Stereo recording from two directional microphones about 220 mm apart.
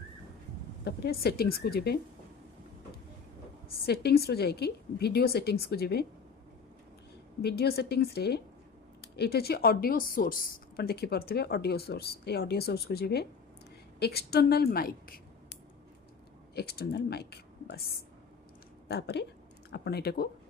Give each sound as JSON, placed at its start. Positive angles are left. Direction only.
{"t": 0.9, "sound": "speech", "side_deg": 45}
{"t": 3.8, "sound": "speech", "side_deg": 45}
{"t": 7.4, "sound": "speech", "side_deg": 45}
{"t": 16.6, "sound": "speech", "side_deg": 45}